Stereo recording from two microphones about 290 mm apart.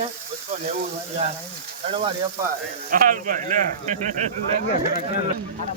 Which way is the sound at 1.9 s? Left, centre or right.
Centre.